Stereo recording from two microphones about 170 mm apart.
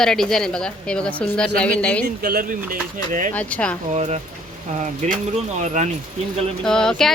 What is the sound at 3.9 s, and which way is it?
Speech, 40° right (ahead or behind).